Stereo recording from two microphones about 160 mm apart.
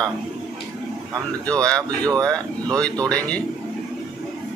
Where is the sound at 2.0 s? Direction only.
25° right (ahead or behind).